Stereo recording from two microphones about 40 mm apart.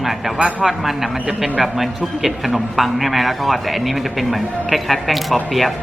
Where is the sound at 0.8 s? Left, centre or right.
Centre.